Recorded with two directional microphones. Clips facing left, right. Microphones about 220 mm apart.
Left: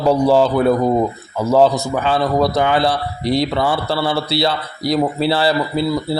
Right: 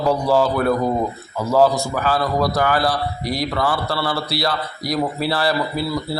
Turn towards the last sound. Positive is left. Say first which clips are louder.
# left 4 dB
turn(degrees=25)  # may be behind; listen again after turning